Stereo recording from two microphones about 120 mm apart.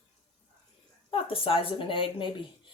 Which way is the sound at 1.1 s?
50° left (ahead or behind).